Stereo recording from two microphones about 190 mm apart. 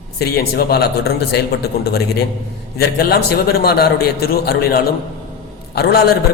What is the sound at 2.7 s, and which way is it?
A man's voice, 55° left (ahead or behind).